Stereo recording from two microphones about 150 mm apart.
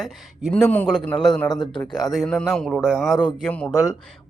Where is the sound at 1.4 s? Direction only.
30° left (ahead or behind).